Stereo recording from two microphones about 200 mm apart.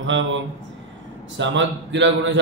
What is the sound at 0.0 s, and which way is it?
Speech, 65° right (ahead or behind).